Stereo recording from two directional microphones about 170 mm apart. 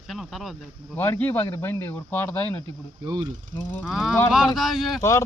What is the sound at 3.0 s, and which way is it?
Pulleys, 25° right (ahead or behind).